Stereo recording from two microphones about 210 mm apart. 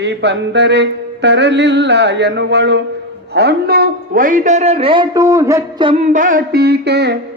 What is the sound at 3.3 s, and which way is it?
A man's voice, 50° right (ahead or behind).